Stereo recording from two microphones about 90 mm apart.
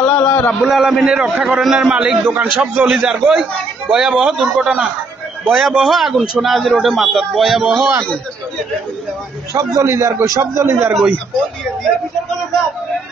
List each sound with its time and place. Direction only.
0.0 s a sound: 30° left (ahead or behind)
0.5 s a man's voice: centre (ahead or behind)
9.5 s a man's voice: 40° right (ahead or behind)